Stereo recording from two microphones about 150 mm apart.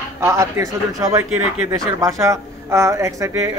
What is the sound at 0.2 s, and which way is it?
A woman's voice, 20° right (ahead or behind).